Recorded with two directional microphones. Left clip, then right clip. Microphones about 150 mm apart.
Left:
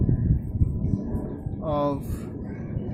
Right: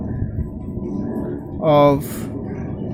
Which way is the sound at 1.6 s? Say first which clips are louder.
Right 13 dB; 35° right (ahead or behind).